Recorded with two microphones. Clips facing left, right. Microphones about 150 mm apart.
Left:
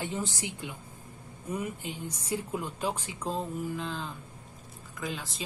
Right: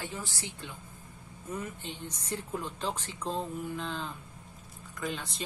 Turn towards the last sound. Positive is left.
turn(degrees=0)  # may be behind; listen again after turning